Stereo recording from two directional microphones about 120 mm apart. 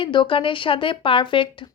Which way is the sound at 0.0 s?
45° left (ahead or behind).